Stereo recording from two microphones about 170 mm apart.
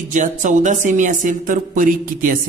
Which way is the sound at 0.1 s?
45° right (ahead or behind).